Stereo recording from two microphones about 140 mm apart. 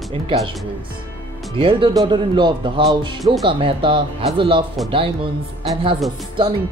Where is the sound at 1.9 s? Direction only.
30° right (ahead or behind).